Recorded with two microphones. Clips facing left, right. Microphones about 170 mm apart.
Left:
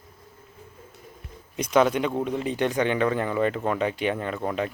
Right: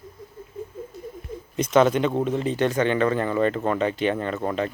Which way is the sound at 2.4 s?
15° left (ahead or behind).